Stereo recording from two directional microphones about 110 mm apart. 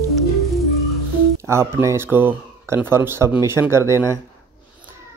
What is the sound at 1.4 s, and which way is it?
Speech, 25° right (ahead or behind).